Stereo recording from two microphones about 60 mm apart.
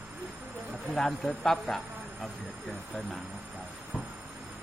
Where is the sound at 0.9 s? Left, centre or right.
Centre.